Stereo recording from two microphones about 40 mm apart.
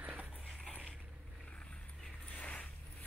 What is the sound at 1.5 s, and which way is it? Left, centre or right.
Vehicle, left.